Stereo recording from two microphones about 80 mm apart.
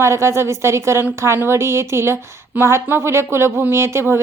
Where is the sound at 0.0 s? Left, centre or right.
Right.